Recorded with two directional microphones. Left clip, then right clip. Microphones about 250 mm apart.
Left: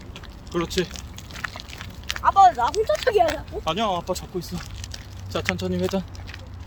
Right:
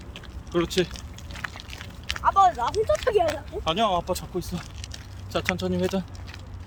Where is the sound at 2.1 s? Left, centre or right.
Centre.